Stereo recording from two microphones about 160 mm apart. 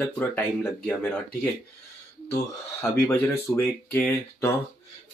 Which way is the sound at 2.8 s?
15° left (ahead or behind).